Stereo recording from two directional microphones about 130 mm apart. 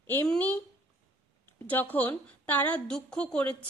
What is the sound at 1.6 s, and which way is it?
A woman's voice, 15° left (ahead or behind).